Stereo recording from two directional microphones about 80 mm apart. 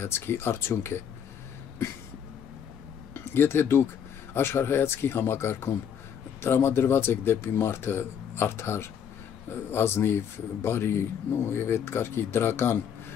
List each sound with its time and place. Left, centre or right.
0.0 s speech: left
3.2 s speech: left